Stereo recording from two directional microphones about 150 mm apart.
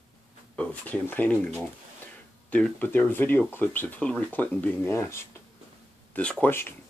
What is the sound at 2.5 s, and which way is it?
Speech, 10° left (ahead or behind).